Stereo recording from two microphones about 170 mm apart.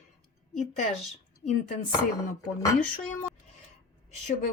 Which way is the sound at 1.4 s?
40° left (ahead or behind).